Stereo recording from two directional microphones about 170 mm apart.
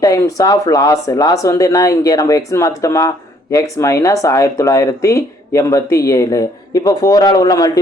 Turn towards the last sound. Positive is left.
turn(degrees=20)  # may be behind; listen again after turning